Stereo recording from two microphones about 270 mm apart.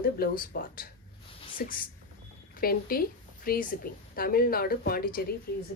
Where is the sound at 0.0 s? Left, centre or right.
Left.